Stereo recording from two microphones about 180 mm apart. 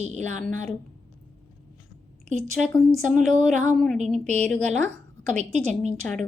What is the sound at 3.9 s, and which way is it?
Speech, 40° right (ahead or behind).